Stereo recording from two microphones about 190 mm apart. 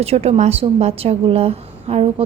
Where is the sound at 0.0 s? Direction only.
35° right (ahead or behind).